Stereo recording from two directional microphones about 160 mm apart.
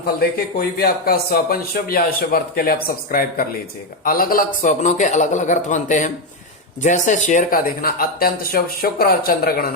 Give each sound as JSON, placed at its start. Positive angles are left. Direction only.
{"t": 0.2, "sound": "a man's voice", "side_deg": 70}